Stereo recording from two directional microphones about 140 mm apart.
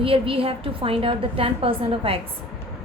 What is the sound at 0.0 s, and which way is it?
A woman's voice, 40° right (ahead or behind).